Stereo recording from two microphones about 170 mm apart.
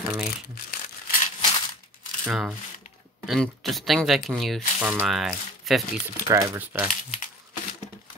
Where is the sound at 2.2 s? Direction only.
5° right (ahead or behind).